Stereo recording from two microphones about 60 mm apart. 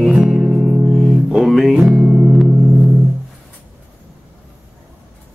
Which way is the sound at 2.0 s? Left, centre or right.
Centre.